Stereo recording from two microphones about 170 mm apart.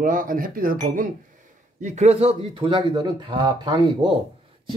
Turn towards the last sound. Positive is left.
turn(degrees=-25)  # may be behind; listen again after turning